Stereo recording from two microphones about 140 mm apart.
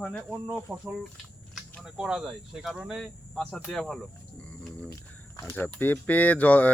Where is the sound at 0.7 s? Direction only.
10° right (ahead or behind).